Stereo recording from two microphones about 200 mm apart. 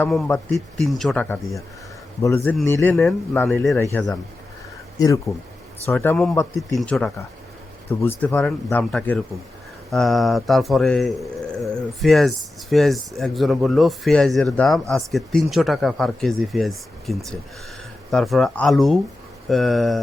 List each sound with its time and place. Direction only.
0.3 s speech: 10° left (ahead or behind)